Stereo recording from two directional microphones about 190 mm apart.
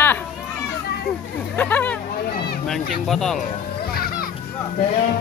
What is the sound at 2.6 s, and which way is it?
Speech, centre (ahead or behind).